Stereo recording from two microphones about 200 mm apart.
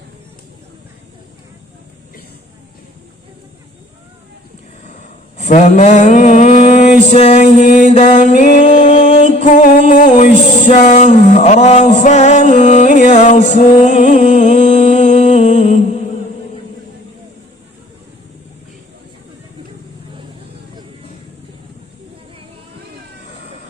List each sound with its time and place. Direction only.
5.4 s mantra: 40° left (ahead or behind)
8.5 s music: 35° left (ahead or behind)
10.5 s a sound: 35° left (ahead or behind)